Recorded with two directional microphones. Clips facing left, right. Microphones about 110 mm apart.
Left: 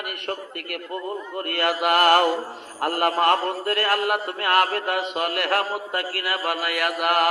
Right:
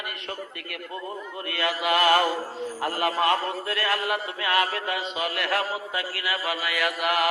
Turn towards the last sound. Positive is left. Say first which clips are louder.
# left 3 dB
turn(degrees=50)  # may be behind; listen again after turning